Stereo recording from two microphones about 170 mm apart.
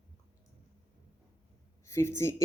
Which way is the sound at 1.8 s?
15° left (ahead or behind).